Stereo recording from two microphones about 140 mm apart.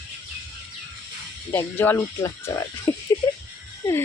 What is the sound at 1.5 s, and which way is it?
Speech, 15° left (ahead or behind).